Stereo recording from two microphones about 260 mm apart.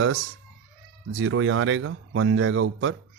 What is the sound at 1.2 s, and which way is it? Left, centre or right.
Speech, right.